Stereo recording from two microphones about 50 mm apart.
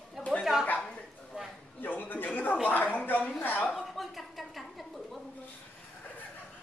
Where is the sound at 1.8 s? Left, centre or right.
Left.